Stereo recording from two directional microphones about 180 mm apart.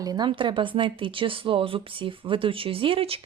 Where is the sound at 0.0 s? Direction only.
25° right (ahead or behind).